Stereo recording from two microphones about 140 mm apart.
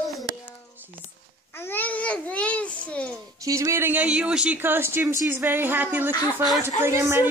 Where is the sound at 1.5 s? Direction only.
15° left (ahead or behind).